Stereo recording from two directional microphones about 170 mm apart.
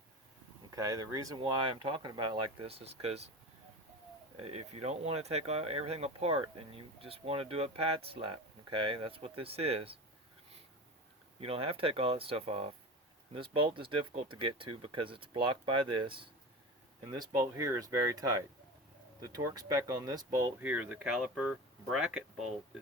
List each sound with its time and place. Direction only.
0.7 s speech: 20° right (ahead or behind); by 3.2 s 35° right (ahead or behind)
4.4 s speech: 40° right (ahead or behind)
11.3 s speech: 35° right (ahead or behind)
20.7 s speech: 10° right (ahead or behind)